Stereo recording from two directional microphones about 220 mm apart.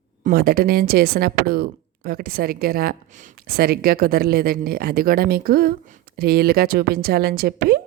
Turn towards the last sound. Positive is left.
turn(degrees=-45)  # may be behind; listen again after turning